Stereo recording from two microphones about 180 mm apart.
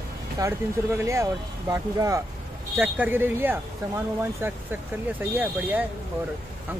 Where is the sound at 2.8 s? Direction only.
10° right (ahead or behind).